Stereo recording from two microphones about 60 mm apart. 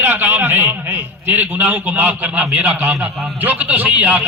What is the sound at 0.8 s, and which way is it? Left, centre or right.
A man's voice, right.